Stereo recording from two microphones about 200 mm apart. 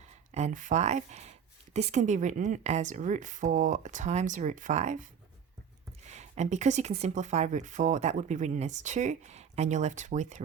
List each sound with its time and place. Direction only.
0.3 s speech: 35° right (ahead or behind)